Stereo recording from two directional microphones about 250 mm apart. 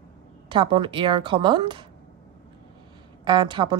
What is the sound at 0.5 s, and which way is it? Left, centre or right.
Speech, centre.